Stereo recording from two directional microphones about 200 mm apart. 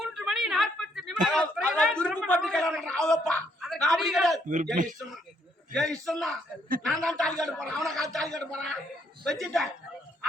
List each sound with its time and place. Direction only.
0.0 s speech: centre (ahead or behind)
4.4 s speech: 40° right (ahead or behind)
5.7 s a man's voice: centre (ahead or behind)